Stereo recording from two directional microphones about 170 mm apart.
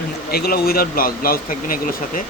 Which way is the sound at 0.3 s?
65° left (ahead or behind).